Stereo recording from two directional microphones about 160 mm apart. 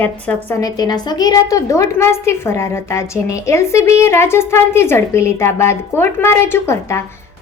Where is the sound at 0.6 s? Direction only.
25° left (ahead or behind).